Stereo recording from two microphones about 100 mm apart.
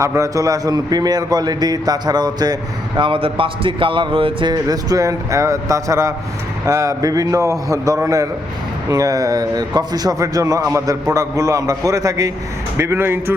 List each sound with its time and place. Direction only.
0.0 s speech: 30° right (ahead or behind)
3.0 s a man's voice: 60° right (ahead or behind)
4.7 s speech: 35° right (ahead or behind)
12.7 s a man's voice: 25° right (ahead or behind)